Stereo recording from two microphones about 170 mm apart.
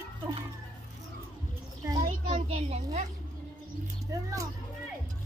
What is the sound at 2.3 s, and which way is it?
Speech, 35° right (ahead or behind).